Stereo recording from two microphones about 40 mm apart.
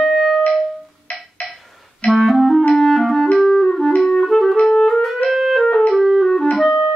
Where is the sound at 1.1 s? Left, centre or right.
Left.